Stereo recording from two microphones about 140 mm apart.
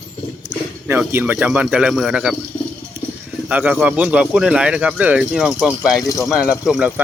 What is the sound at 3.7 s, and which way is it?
Speech, 10° right (ahead or behind).